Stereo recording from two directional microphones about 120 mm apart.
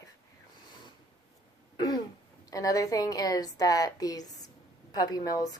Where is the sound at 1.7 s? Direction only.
35° left (ahead or behind).